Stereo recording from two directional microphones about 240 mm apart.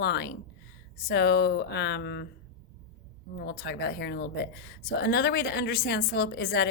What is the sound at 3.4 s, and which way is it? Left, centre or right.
A woman's voice, left.